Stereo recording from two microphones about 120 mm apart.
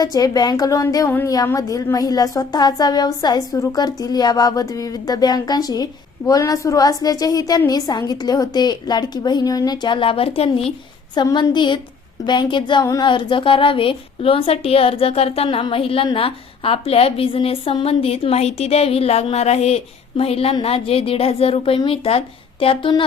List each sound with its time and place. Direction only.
0.0 s a woman's voice: 30° left (ahead or behind); by 10.7 s 55° left (ahead or behind)
11.1 s a woman's voice: 35° left (ahead or behind)